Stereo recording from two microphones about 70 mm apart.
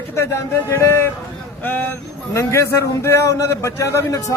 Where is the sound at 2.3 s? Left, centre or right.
Left.